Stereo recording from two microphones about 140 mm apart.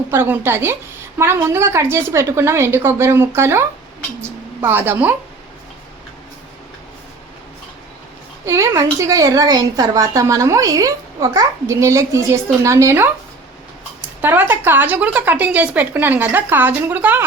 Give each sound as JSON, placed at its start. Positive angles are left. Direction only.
{"t": 0.1, "sound": "a woman's voice", "side_deg": -15}
{"t": 8.4, "sound": "a woman's voice", "side_deg": -20}
{"t": 14.2, "sound": "speech", "side_deg": -15}